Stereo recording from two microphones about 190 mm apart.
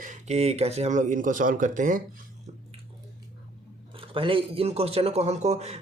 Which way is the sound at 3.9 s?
30° right (ahead or behind).